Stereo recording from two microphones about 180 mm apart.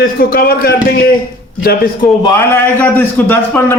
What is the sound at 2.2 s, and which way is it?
A man's voice, 15° left (ahead or behind).